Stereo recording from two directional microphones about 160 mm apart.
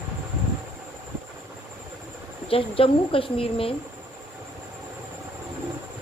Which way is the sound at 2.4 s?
35° left (ahead or behind).